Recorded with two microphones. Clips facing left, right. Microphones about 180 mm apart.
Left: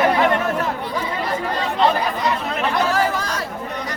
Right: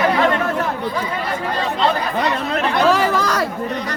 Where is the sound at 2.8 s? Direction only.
90° right.